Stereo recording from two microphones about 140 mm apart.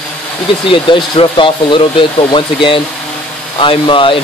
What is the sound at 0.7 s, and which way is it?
Speech, 35° left (ahead or behind).